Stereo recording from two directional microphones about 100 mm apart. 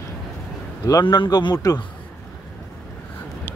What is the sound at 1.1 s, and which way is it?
Speech, 45° left (ahead or behind).